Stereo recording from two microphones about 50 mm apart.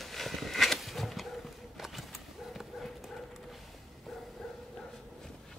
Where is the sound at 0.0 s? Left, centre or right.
Centre.